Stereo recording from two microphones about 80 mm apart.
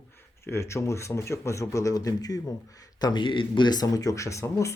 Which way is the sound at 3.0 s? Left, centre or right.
Left.